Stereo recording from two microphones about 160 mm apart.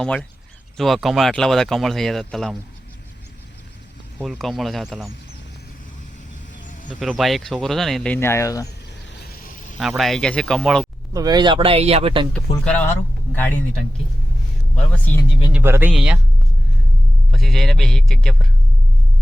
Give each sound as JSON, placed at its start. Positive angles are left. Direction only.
{"t": 0.0, "sound": "speech", "side_deg": 5}
{"t": 4.2, "sound": "speech", "side_deg": 0}
{"t": 7.0, "sound": "speech", "side_deg": 0}
{"t": 9.2, "sound": "a sound", "side_deg": 70}
{"t": 9.7, "sound": "speech", "side_deg": 0}
{"t": 11.1, "sound": "speech", "side_deg": -25}
{"t": 12.3, "sound": "speech", "side_deg": 10}
{"t": 14.8, "sound": "speech", "side_deg": 10}
{"t": 15.5, "sound": "speech", "side_deg": -15}
{"t": 17.3, "sound": "speech", "side_deg": 0}